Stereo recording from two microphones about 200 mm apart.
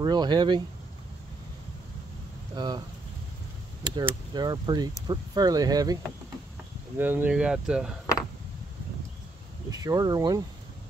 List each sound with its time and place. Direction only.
0.0 s speech: 20° right (ahead or behind)
2.5 s speech: 20° right (ahead or behind)
3.8 s speech: 20° right (ahead or behind)
7.0 s speech: 10° right (ahead or behind)
9.7 s speech: 15° right (ahead or behind)